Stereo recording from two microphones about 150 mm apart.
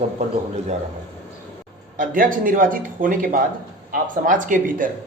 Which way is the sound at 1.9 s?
65° right (ahead or behind).